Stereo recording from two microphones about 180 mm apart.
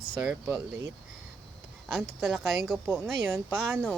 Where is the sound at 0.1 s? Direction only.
10° right (ahead or behind).